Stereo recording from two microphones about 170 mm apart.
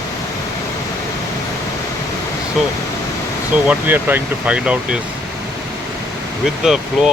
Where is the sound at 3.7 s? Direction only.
10° right (ahead or behind).